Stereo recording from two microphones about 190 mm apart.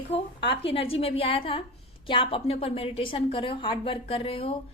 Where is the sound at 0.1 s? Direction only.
30° left (ahead or behind).